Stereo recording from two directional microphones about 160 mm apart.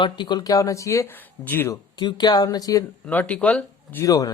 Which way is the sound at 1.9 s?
25° left (ahead or behind).